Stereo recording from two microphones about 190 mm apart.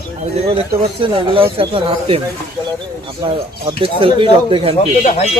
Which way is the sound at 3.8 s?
30° right (ahead or behind).